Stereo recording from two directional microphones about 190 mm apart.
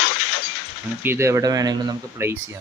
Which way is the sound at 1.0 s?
15° right (ahead or behind).